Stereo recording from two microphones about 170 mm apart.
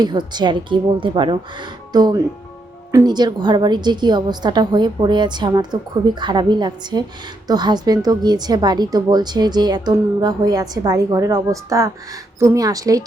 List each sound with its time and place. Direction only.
0.0 s a woman's voice: 25° right (ahead or behind)